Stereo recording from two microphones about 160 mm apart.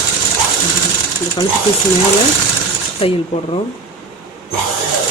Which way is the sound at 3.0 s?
35° left (ahead or behind).